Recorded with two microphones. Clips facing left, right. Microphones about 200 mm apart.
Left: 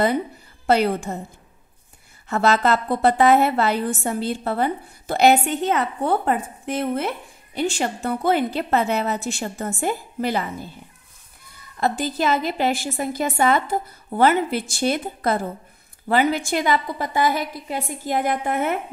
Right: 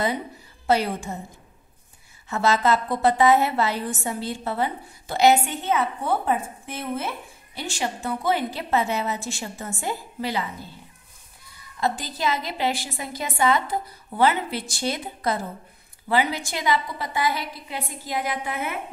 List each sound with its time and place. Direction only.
1.1 s a woman's voice: 65° left (ahead or behind)
2.2 s a woman's voice: 55° left (ahead or behind)
11.8 s a woman's voice: 55° left (ahead or behind)